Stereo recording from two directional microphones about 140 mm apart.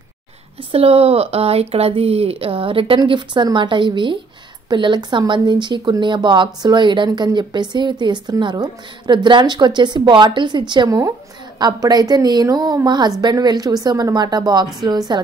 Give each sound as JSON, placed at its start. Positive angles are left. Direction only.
{"t": 0.7, "sound": "a woman's voice", "side_deg": -45}